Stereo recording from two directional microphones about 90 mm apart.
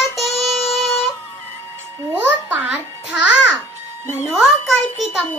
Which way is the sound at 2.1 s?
20° right (ahead or behind).